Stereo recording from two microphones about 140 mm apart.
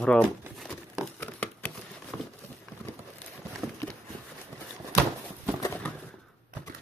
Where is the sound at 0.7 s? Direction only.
10° left (ahead or behind).